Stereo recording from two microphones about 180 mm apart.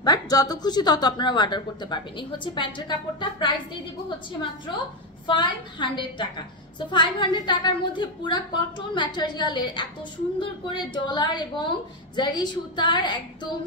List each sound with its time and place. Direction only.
0.0 s a woman's voice: 20° left (ahead or behind)
5.2 s a woman's voice: 25° left (ahead or behind)